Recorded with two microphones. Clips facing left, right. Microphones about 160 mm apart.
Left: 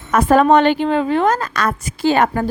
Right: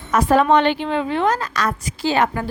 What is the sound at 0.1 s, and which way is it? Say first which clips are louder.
A woman's voice: left 3 dB; 50° left (ahead or behind).